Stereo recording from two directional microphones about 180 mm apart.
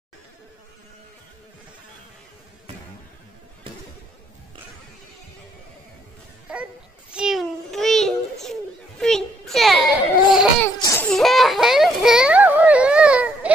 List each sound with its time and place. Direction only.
6.5 s babbling: 5° right (ahead or behind)
10.8 s baby cry: 15° left (ahead or behind)
11.1 s a sound: centre (ahead or behind)